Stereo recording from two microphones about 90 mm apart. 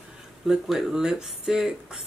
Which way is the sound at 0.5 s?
5° right (ahead or behind).